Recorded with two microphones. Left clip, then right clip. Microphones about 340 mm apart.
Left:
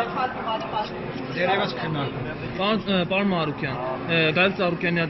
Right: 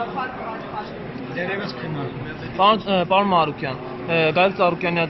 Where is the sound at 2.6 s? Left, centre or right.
Right.